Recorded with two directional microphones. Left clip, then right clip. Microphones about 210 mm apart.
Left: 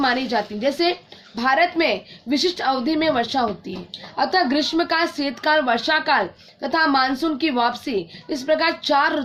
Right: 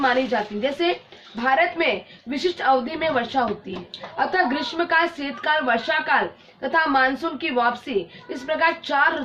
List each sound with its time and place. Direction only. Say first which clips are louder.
0.0 s a woman's voice: even; 50° left (ahead or behind)